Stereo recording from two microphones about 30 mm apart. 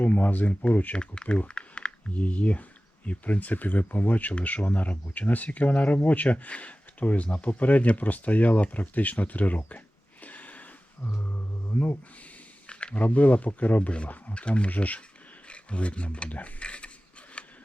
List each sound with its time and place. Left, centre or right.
0.0 s speech: left
0.9 s speech: left
1.5 s a sound: left
2.0 s speech: left
6.2 s speech: left
10.2 s a sound: left
11.2 s music: left
12.6 s speech: left
14.3 s speech: left
14.7 s speech: left
15.4 s a sound: left